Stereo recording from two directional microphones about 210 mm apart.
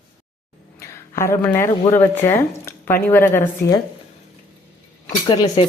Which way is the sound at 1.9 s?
10° left (ahead or behind).